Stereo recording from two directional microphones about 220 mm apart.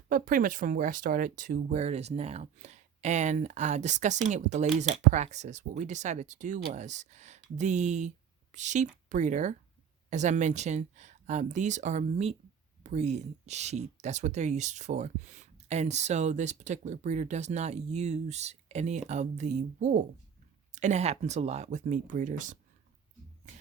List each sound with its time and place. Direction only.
0.1 s speech: 40° right (ahead or behind)